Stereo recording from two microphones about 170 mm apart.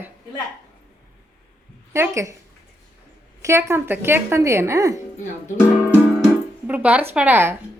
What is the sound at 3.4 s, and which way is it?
A woman's voice, 15° right (ahead or behind).